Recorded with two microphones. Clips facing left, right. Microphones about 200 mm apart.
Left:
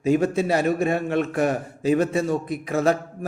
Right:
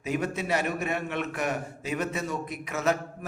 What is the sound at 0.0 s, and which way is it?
A man's voice, 30° left (ahead or behind).